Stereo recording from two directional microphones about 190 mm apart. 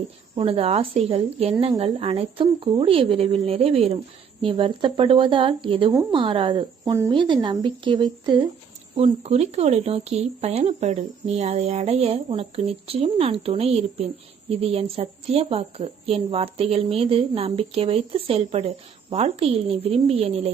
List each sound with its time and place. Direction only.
0.3 s speech: 30° right (ahead or behind)